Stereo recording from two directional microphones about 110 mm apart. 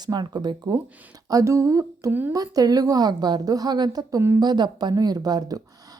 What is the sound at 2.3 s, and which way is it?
A woman's voice, 35° right (ahead or behind).